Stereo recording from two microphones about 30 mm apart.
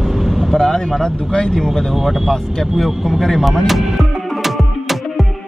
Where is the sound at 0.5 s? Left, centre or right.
Centre.